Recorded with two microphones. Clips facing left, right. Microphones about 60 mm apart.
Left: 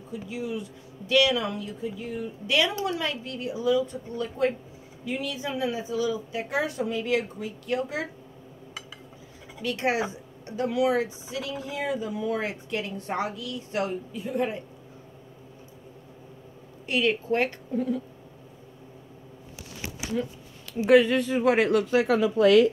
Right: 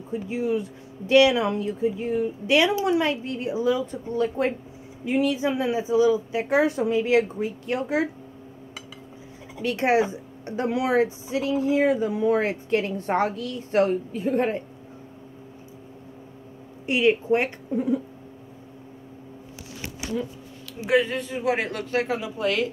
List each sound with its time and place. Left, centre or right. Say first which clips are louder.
0.1 s speech: right 7 dB; right
9.6 s a woman's voice: right 5 dB; right
16.8 s speech: right 4 dB; right
20.9 s a man's voice: left 4 dB; left